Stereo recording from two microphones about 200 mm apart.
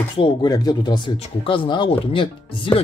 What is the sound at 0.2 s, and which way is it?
Speech, 20° left (ahead or behind).